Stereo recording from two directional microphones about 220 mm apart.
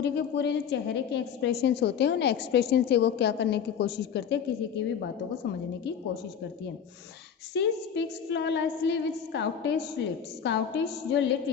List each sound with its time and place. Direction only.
0.0 s a woman's voice: 50° left (ahead or behind)
7.5 s a woman's voice: 55° left (ahead or behind)